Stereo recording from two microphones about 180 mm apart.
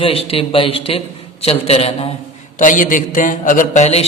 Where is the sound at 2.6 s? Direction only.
45° left (ahead or behind).